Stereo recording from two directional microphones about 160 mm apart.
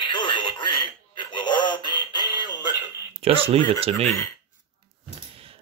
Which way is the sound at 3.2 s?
35° right (ahead or behind).